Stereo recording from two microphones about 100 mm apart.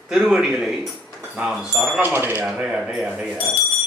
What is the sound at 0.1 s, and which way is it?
Speech, 5° right (ahead or behind).